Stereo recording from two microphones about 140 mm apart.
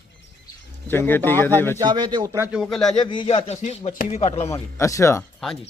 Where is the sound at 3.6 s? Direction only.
60° left (ahead or behind).